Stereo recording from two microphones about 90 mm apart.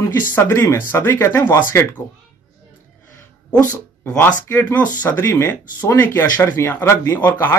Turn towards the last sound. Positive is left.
turn(degrees=20)  # may be behind; listen again after turning